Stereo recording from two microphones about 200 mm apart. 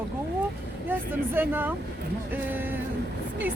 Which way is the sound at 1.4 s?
10° right (ahead or behind).